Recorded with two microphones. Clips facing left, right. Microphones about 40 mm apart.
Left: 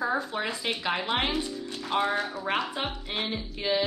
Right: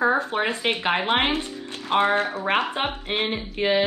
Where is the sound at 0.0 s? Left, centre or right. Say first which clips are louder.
Right 7 dB; right.